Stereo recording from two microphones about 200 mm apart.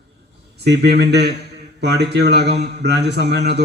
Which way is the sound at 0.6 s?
55° right (ahead or behind).